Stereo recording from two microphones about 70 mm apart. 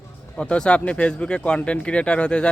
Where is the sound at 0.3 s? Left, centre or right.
Centre.